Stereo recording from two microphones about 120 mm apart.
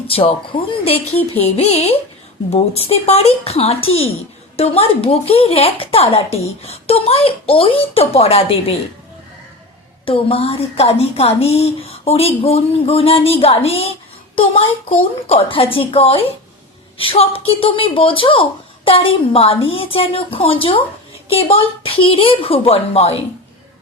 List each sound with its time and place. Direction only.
0.1 s speech: 55° left (ahead or behind)
10.1 s a woman's voice: 55° left (ahead or behind)